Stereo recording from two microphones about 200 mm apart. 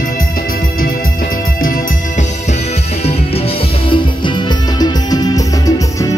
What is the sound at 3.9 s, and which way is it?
Music, 25° left (ahead or behind).